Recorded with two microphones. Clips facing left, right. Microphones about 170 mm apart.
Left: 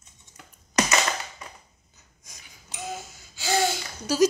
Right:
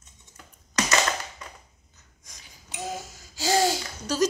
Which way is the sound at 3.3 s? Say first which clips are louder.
Right 2 dB; 35° right (ahead or behind).